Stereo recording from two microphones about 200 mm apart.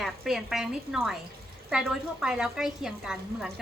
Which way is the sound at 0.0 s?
Centre (ahead or behind).